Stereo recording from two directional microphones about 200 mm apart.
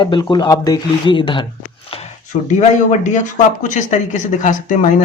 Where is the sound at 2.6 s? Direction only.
35° left (ahead or behind).